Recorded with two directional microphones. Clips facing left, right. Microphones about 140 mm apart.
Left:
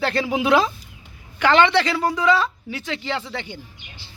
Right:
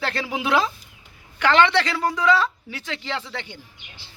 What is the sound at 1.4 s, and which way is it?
Speech, 5° left (ahead or behind).